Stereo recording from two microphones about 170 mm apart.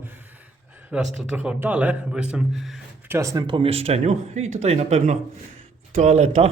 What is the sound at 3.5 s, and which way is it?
Speech, 35° right (ahead or behind).